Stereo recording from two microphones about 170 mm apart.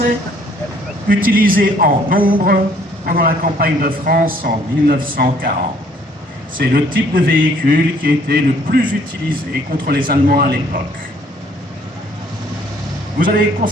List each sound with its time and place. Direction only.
1.1 s a man's voice: 55° right (ahead or behind)
6.6 s a man's voice: 55° right (ahead or behind)
13.1 s a man's voice: 55° right (ahead or behind)